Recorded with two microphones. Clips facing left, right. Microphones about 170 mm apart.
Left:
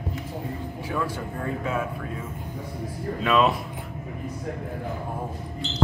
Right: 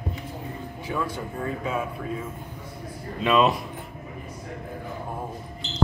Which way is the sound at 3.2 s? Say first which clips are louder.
Right 1 dB; centre (ahead or behind).